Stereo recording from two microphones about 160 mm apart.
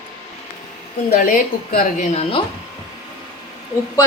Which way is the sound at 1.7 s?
60° left (ahead or behind).